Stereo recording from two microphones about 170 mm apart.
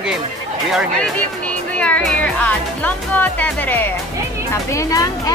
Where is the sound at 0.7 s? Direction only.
5° left (ahead or behind).